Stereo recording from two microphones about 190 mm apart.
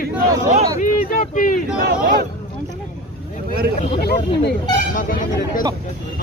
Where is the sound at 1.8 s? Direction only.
50° right (ahead or behind).